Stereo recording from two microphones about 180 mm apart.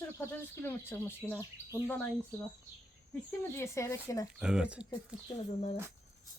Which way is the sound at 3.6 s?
15° left (ahead or behind).